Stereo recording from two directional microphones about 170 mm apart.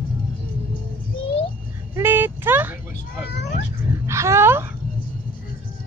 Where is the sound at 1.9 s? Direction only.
10° right (ahead or behind).